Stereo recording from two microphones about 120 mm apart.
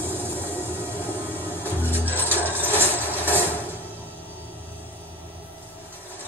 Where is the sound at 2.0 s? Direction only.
15° right (ahead or behind).